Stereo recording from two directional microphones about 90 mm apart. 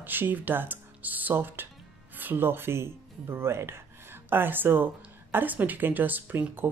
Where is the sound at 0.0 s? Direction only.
20° right (ahead or behind).